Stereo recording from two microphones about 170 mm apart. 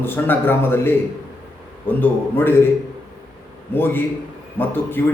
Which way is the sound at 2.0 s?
10° left (ahead or behind).